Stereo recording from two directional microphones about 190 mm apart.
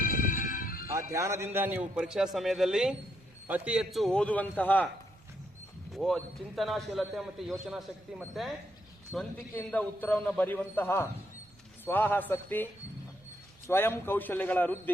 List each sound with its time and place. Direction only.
0.0 s music: 45° left (ahead or behind)
0.9 s a man's voice: 15° right (ahead or behind); by 4.9 s 10° left (ahead or behind)
5.9 s a man's voice: centre (ahead or behind)
13.7 s a man's voice: 10° left (ahead or behind)